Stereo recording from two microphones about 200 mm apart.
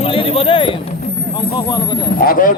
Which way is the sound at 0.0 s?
30° left (ahead or behind).